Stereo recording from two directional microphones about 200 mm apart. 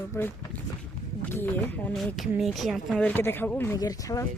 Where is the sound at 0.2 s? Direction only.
15° left (ahead or behind).